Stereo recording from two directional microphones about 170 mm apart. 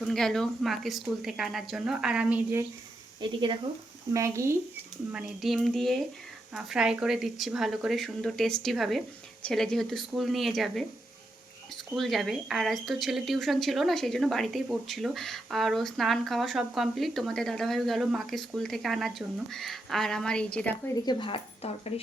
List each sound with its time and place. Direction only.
0.0 s speech: centre (ahead or behind)
3.2 s speech: 30° right (ahead or behind)
4.1 s speech: 15° right (ahead or behind)
5.1 s speech: centre (ahead or behind)
11.9 s speech: centre (ahead or behind)
20.9 s speech: 25° left (ahead or behind)